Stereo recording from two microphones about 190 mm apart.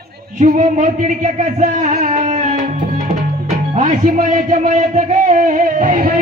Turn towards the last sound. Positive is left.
turn(degrees=-45)  # may be behind; listen again after turning